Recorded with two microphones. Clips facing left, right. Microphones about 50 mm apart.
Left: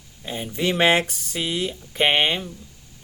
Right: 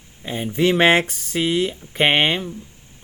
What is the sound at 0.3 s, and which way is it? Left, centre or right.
Speech, right.